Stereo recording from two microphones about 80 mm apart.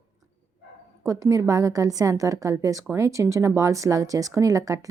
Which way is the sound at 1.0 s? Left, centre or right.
Right.